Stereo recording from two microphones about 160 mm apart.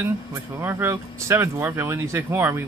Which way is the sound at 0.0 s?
15° right (ahead or behind).